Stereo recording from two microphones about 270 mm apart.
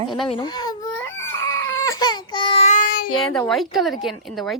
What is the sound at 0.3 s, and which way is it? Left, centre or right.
Crying, centre.